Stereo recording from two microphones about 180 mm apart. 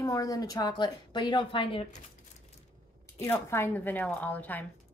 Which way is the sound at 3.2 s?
15° left (ahead or behind).